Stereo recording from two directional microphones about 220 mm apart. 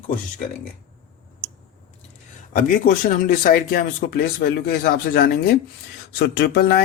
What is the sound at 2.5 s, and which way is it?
Speech, 40° left (ahead or behind).